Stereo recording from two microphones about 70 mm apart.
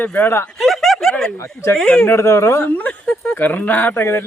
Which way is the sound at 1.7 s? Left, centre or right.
Centre.